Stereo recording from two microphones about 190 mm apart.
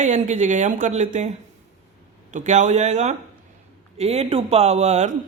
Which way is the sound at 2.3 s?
40° right (ahead or behind).